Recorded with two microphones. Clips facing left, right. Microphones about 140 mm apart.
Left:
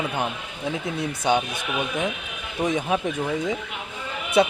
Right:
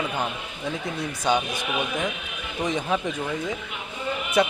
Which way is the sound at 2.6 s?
10° left (ahead or behind).